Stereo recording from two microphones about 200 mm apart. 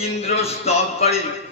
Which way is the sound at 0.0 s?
30° left (ahead or behind).